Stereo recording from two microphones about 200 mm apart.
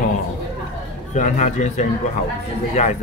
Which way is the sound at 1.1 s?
35° left (ahead or behind).